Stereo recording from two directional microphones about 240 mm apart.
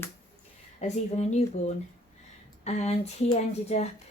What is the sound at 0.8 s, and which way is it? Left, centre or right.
Speech, left.